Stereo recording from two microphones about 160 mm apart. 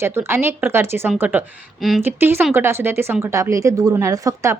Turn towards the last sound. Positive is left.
turn(degrees=-20)  # may be behind; listen again after turning